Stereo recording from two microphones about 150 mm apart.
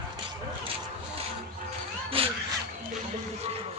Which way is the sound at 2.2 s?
40° right (ahead or behind).